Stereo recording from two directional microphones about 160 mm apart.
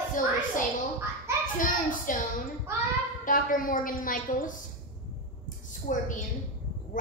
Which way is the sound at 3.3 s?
60° left (ahead or behind).